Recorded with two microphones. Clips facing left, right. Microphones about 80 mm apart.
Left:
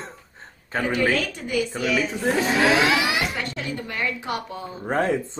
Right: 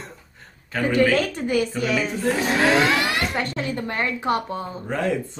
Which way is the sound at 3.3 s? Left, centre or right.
Right.